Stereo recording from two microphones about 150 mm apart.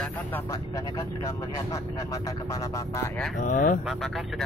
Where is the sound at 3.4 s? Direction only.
60° left (ahead or behind).